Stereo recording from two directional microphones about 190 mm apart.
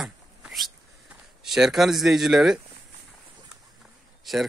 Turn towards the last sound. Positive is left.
turn(degrees=0)  # may be behind; listen again after turning